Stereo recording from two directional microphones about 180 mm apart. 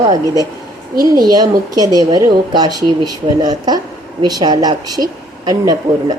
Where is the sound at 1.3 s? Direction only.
20° right (ahead or behind).